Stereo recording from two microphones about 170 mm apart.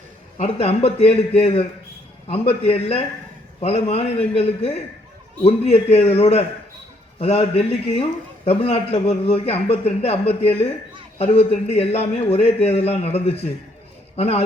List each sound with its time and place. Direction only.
0.3 s a man's voice: 35° left (ahead or behind)